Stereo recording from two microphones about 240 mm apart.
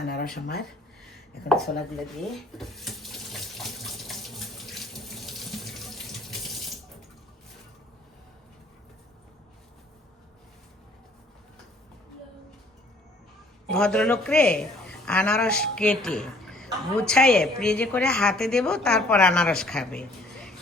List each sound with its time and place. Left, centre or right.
0.0 s speech: left
1.5 s a woman's voice: centre
2.3 s water tap: centre
13.7 s a woman's voice: centre